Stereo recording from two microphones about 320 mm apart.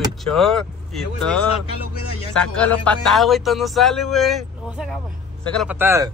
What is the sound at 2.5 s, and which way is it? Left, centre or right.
A man's voice, centre.